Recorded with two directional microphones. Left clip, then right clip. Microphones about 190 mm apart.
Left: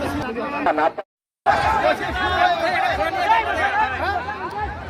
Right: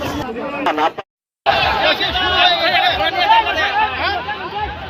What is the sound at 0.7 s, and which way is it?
Speech, 30° left (ahead or behind).